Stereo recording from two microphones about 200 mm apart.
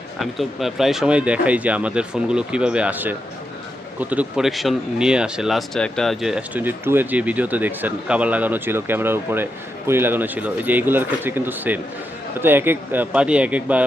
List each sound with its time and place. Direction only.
0.2 s speech: centre (ahead or behind)